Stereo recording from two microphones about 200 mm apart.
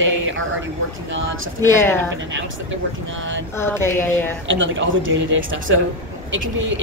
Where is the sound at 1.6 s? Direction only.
10° left (ahead or behind).